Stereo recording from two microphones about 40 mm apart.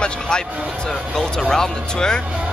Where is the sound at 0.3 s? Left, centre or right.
Centre.